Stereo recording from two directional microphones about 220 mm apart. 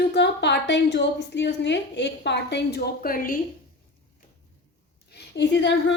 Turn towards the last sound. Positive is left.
turn(degrees=55)  # may be behind; listen again after turning